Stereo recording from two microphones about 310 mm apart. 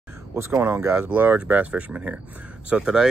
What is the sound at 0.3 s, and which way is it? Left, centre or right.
Speech, centre.